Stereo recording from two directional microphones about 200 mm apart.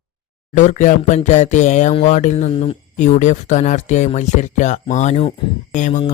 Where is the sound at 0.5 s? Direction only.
35° left (ahead or behind).